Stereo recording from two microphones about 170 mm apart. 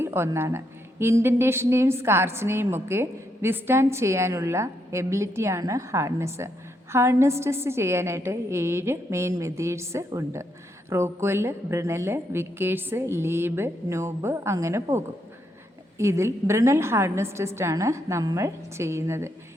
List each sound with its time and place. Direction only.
0.0 s a woman's voice: 15° right (ahead or behind)